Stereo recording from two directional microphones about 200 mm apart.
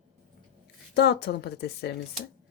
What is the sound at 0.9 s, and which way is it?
A woman's voice, 55° left (ahead or behind).